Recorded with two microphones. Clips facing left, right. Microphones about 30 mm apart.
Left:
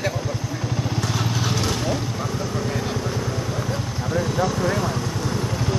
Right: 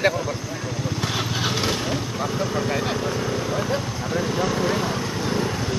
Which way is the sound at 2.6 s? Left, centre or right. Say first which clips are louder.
Right 2 dB; right.